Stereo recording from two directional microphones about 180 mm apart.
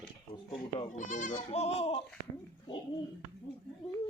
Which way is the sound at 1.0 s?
45° left (ahead or behind).